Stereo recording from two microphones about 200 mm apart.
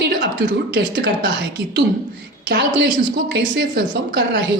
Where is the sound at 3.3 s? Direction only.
60° right (ahead or behind).